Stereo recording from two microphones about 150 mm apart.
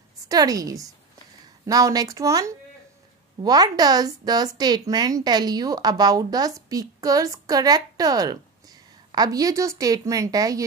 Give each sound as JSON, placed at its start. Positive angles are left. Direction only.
{"t": 0.3, "sound": "speech", "side_deg": -25}